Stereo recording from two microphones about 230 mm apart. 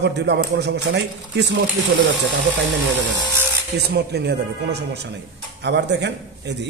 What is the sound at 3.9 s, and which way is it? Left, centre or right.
A man's voice, right.